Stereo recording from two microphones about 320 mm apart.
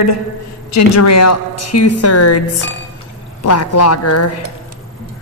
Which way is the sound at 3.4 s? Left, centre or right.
Left.